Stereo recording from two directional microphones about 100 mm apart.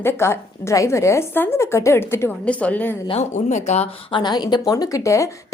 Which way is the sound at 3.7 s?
90° left.